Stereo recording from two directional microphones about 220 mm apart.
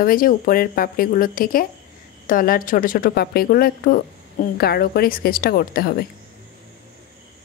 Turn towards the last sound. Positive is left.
turn(degrees=45)  # may be behind; listen again after turning